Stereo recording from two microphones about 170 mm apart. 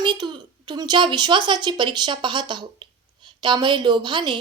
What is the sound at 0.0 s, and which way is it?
A woman's voice, 25° right (ahead or behind).